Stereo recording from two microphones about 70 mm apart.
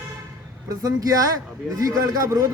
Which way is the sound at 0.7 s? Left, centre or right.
Right.